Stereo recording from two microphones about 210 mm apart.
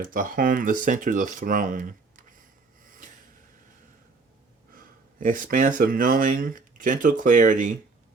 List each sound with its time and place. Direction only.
0.0 s speech: 40° right (ahead or behind)
2.8 s a sound: 40° right (ahead or behind)
4.7 s speech: 40° right (ahead or behind)